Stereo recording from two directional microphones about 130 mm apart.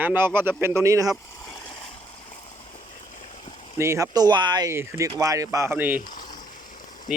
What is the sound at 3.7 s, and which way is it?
Speech, 20° right (ahead or behind).